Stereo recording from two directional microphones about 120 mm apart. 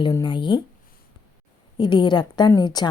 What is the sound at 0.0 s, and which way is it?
Speech, 35° left (ahead or behind).